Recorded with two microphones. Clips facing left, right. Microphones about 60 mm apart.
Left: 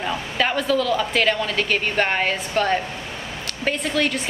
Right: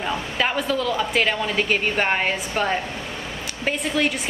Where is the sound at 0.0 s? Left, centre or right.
Centre.